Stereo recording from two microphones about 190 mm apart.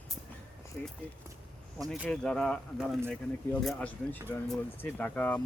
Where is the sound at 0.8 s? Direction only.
10° left (ahead or behind).